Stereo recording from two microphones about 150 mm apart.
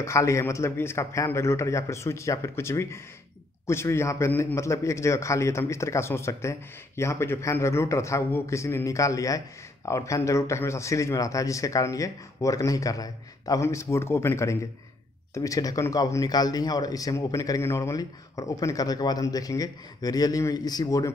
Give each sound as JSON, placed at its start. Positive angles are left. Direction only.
{"t": 0.0, "sound": "speech", "side_deg": 20}